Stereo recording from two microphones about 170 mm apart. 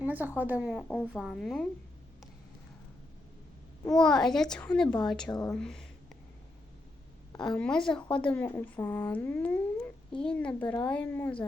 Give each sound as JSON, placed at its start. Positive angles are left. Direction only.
{"t": 0.0, "sound": "a woman's voice", "side_deg": -10}
{"t": 3.9, "sound": "speech", "side_deg": 5}
{"t": 5.3, "sound": "speech", "side_deg": 25}
{"t": 5.5, "sound": "speech", "side_deg": 5}
{"t": 7.4, "sound": "speech", "side_deg": 5}